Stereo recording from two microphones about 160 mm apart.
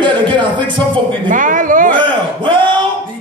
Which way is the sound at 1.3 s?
55° right (ahead or behind).